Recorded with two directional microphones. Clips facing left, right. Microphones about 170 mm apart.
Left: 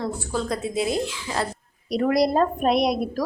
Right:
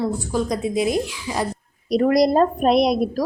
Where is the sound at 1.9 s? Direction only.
40° right (ahead or behind).